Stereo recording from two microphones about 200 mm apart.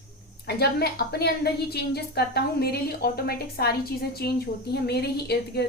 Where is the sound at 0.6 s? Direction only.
55° left (ahead or behind).